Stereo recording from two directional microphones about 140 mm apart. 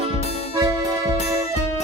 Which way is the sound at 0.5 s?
30° right (ahead or behind).